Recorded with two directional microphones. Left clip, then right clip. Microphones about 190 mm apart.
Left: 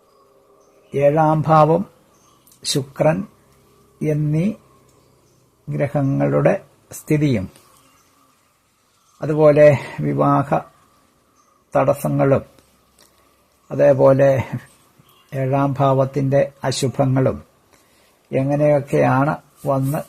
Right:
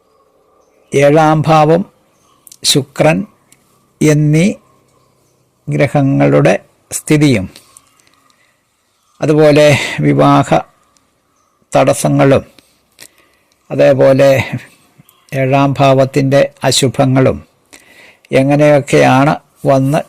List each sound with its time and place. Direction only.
0.9 s speech: 35° right (ahead or behind)
5.6 s speech: 35° right (ahead or behind)
6.8 s speech: 25° right (ahead or behind)
9.1 s speech: 30° right (ahead or behind)
11.7 s speech: 35° right (ahead or behind)
13.7 s speech: 20° right (ahead or behind); by 20.1 s 40° right (ahead or behind)